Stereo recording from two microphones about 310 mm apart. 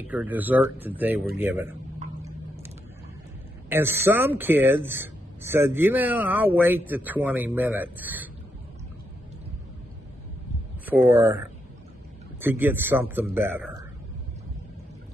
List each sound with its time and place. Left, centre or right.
0.0 s speech: centre
3.6 s speech: centre
10.9 s speech: centre